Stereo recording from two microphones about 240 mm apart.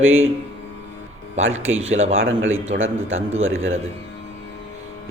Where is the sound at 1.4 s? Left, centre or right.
Right.